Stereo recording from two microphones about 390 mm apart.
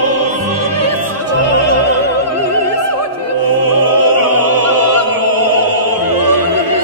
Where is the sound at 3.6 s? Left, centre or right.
Right.